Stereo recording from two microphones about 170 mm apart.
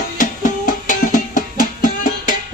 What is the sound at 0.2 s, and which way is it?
Music, 50° left (ahead or behind).